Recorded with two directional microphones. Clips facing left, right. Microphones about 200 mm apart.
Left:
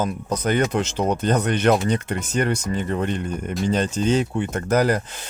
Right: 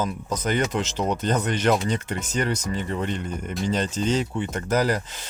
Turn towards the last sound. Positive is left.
turn(degrees=55)  # may be behind; listen again after turning